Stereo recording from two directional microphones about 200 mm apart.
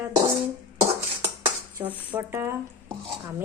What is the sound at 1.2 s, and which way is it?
Dishes, 10° right (ahead or behind).